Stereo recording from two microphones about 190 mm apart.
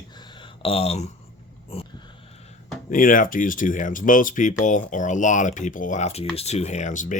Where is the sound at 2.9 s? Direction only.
45° left (ahead or behind).